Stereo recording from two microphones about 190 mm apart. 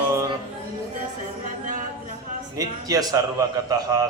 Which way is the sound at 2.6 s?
20° right (ahead or behind).